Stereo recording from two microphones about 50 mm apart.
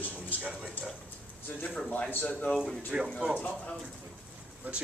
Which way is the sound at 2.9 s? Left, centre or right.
Right.